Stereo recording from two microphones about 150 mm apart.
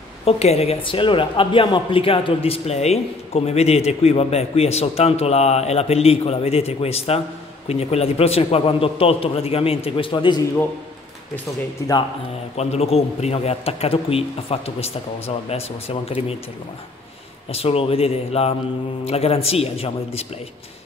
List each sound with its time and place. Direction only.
0.2 s a woman's voice: 45° left (ahead or behind)
12.5 s a woman's voice: 45° left (ahead or behind)
17.5 s a man's voice: 40° left (ahead or behind)